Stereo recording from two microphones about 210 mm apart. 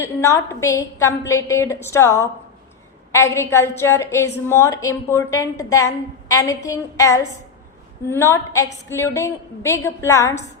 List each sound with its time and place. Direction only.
0.0 s a woman's voice: 15° left (ahead or behind)